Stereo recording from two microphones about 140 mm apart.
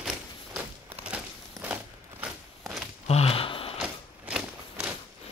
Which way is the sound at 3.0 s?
45° left (ahead or behind).